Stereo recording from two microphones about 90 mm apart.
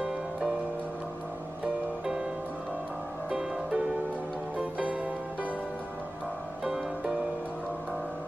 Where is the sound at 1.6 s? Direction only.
10° right (ahead or behind).